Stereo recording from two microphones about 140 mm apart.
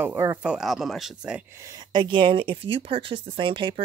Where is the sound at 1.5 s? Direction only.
25° right (ahead or behind).